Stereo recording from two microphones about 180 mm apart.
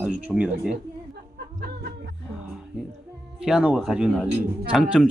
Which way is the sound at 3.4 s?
5° right (ahead or behind).